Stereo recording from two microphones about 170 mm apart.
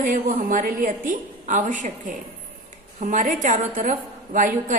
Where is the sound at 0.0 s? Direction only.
50° right (ahead or behind).